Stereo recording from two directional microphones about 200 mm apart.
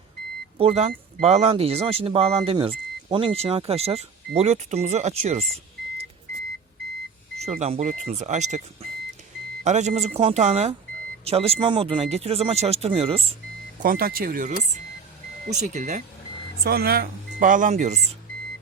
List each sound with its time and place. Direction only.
0.6 s speech: 30° right (ahead or behind)
7.3 s speech: 35° right (ahead or behind)
13.7 s speech: 45° right (ahead or behind)
16.6 s speech: 50° right (ahead or behind)